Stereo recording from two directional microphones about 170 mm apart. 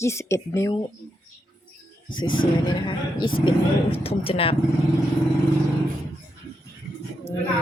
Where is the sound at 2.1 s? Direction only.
25° left (ahead or behind).